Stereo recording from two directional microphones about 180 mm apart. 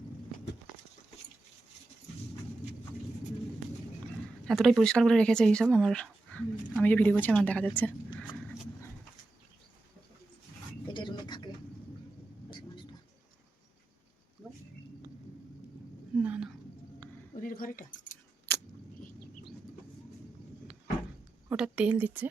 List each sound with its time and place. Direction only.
4.4 s speech: centre (ahead or behind)
10.8 s bird: 25° left (ahead or behind)
12.5 s thunder: 25° left (ahead or behind)
16.1 s a sound: 10° right (ahead or behind)
17.4 s keys jangling: 50° left (ahead or behind)
21.5 s a sound: 5° right (ahead or behind)